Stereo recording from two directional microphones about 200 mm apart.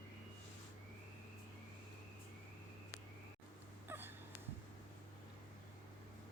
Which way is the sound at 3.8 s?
10° right (ahead or behind).